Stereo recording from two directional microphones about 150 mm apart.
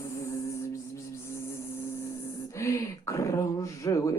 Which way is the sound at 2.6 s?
20° left (ahead or behind).